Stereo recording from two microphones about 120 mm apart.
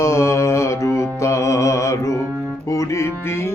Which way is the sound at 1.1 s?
25° left (ahead or behind).